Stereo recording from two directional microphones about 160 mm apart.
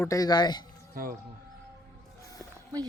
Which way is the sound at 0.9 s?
60° right (ahead or behind).